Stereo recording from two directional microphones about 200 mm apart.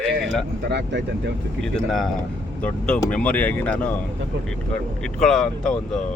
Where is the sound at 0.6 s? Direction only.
55° right (ahead or behind).